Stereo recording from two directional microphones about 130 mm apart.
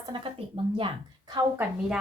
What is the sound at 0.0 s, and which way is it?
Speech, 40° right (ahead or behind).